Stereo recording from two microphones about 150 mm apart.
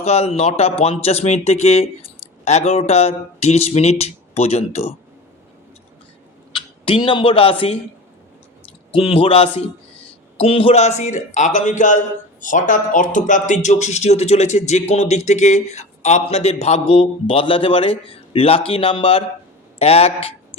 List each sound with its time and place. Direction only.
0.0 s speech: 45° left (ahead or behind)
6.5 s speech: 35° left (ahead or behind)
8.9 s a man's voice: 35° left (ahead or behind)